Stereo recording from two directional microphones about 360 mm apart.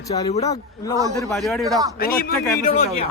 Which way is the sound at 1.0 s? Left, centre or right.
Centre.